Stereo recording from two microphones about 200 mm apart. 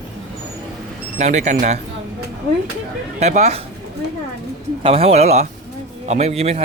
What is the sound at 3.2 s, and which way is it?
Speech, 35° right (ahead or behind).